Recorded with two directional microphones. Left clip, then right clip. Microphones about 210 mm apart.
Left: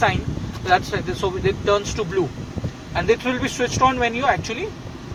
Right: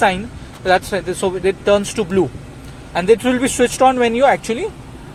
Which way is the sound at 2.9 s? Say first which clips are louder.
Right 6 dB; 50° right (ahead or behind).